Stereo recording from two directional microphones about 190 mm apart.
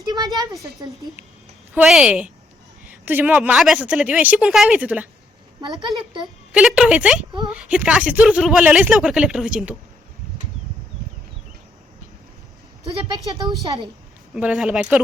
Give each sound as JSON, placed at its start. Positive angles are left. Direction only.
{"t": 0.0, "sound": "a sound", "side_deg": -20}
{"t": 0.3, "sound": "a woman's voice", "side_deg": -20}
{"t": 1.7, "sound": "speech", "side_deg": -5}
{"t": 6.5, "sound": "speech", "side_deg": -5}
{"t": 13.1, "sound": "a woman's voice", "side_deg": -20}
{"t": 14.3, "sound": "speech", "side_deg": -5}